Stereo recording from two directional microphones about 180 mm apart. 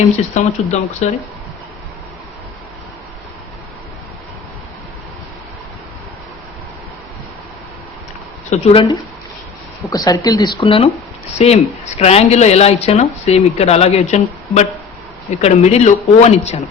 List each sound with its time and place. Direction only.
0.3 s speech: 40° left (ahead or behind)
8.4 s speech: 30° left (ahead or behind)
9.9 s speech: 20° left (ahead or behind); by 16.6 s 35° left (ahead or behind)